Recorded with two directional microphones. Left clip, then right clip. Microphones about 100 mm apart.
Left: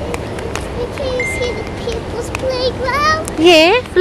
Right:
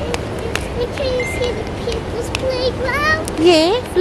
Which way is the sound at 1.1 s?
15° left (ahead or behind).